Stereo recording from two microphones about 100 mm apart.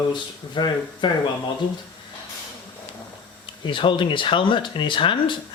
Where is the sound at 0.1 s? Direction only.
50° left (ahead or behind).